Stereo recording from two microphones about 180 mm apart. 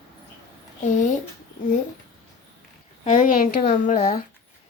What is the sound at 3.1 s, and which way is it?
Speech, 50° left (ahead or behind).